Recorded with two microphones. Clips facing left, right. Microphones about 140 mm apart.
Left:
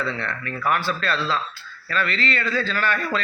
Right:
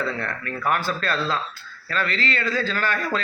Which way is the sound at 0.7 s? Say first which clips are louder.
Left 1 dB; 45° right (ahead or behind).